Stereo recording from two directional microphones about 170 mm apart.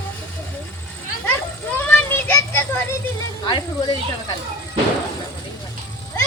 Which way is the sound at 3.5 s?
25° left (ahead or behind).